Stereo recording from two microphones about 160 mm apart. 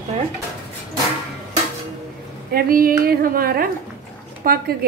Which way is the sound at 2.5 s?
65° right (ahead or behind).